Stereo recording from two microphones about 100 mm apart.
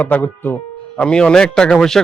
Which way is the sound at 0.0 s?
15° left (ahead or behind).